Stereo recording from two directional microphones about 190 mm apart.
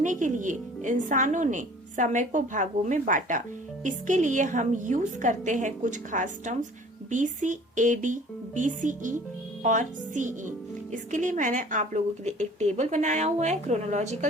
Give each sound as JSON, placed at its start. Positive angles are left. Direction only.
{"t": 0.0, "sound": "speech", "side_deg": -40}